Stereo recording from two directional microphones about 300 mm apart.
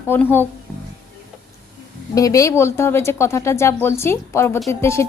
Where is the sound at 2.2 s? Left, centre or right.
Centre.